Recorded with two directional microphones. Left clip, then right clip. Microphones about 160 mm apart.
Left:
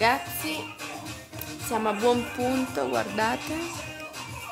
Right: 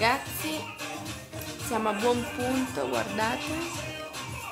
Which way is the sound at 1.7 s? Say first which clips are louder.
Left 2 dB; 40° left (ahead or behind).